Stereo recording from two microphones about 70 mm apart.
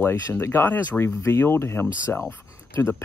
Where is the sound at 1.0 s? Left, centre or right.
Left.